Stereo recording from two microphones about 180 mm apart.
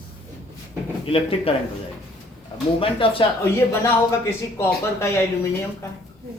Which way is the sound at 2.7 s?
30° left (ahead or behind).